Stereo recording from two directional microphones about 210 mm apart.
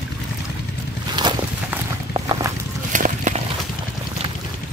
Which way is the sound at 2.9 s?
35° right (ahead or behind).